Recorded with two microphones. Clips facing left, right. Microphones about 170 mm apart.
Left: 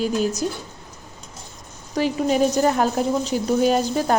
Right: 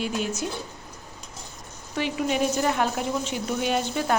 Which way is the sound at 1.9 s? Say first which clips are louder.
Left 6 dB; 40° left (ahead or behind).